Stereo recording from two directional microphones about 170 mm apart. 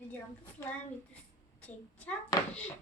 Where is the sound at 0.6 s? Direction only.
15° left (ahead or behind).